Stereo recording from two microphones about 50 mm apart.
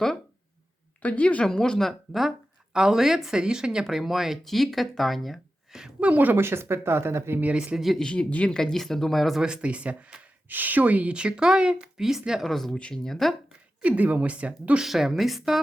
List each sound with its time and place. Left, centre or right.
1.0 s speech: left
1.5 s speech: centre
1.8 s speech: centre
6.0 s speech: right
6.4 s speech: right
7.5 s speech: centre
7.8 s speech: centre
8.0 s speech: left
8.4 s speech: centre
9.4 s speech: centre
12.4 s speech: centre
13.8 s speech: right
14.8 s speech: centre